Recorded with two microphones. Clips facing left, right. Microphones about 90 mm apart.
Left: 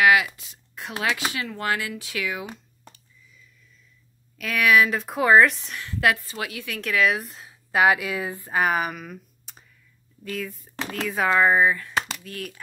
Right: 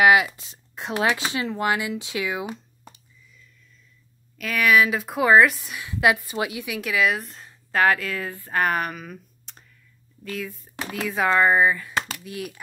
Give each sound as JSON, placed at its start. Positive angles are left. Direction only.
{"t": 0.0, "sound": "a sound", "side_deg": -25}
{"t": 0.4, "sound": "speech", "side_deg": -25}
{"t": 4.4, "sound": "a woman's voice", "side_deg": 0}
{"t": 8.5, "sound": "speech", "side_deg": 5}